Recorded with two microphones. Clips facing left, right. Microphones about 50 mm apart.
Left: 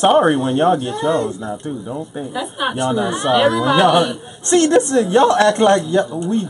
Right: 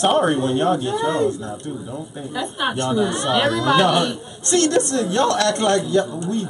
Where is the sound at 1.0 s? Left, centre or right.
Centre.